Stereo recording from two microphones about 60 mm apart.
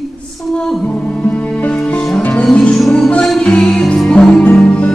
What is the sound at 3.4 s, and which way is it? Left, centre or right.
Music, left.